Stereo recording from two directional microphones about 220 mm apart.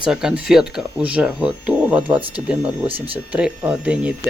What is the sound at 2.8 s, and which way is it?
Speech, 25° right (ahead or behind).